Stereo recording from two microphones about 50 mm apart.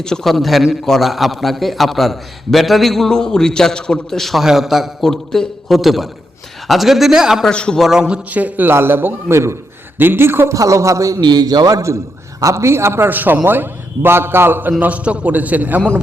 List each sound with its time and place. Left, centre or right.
0.0 s a man's voice: centre
4.2 s a man's voice: centre
4.9 s a man's voice: centre
7.5 s a man's voice: centre
7.8 s a man's voice: centre
8.3 s a man's voice: right
8.7 s a man's voice: right
10.0 s a man's voice: right
10.5 s a man's voice: right
12.5 s a man's voice: right
13.1 s a man's voice: right
14.8 s a man's voice: right